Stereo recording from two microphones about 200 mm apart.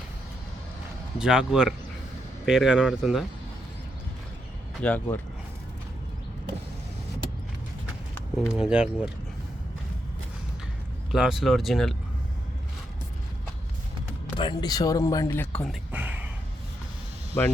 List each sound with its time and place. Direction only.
1.2 s speech: 5° right (ahead or behind)
4.8 s speech: 10° left (ahead or behind)
8.4 s speech: centre (ahead or behind)
11.1 s speech: centre (ahead or behind)
14.3 s speech: 25° left (ahead or behind); by 15.8 s 5° left (ahead or behind)
15.9 s a sound: 10° right (ahead or behind)